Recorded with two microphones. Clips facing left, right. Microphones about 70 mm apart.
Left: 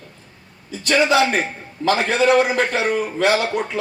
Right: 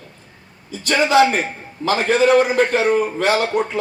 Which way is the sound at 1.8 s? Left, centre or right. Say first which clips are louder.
Left 1 dB; left.